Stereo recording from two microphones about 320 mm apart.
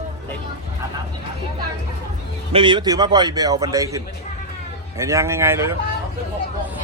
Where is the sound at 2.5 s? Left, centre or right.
Centre.